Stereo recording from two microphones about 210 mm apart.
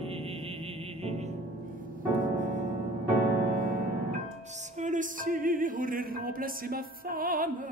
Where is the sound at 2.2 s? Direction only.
35° right (ahead or behind).